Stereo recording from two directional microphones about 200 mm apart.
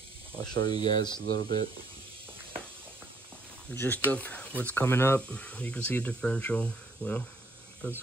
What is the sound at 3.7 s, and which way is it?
Speech, 10° left (ahead or behind).